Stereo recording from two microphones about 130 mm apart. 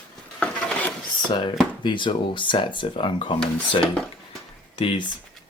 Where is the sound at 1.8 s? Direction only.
40° left (ahead or behind).